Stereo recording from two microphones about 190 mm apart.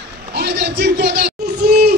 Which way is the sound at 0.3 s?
60° right (ahead or behind).